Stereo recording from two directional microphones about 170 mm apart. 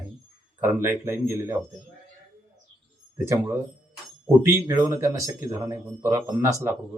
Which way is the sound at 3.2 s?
15° right (ahead or behind).